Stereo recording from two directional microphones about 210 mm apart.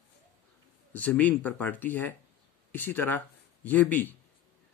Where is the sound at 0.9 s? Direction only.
5° left (ahead or behind).